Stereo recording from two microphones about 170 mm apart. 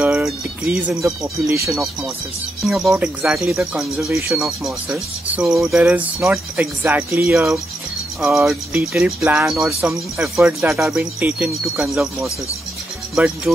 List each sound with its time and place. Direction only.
0.0 s speech: 5° right (ahead or behind)
1.0 s speech: 20° right (ahead or behind)
2.6 s speech: centre (ahead or behind)
8.2 s speech: centre (ahead or behind)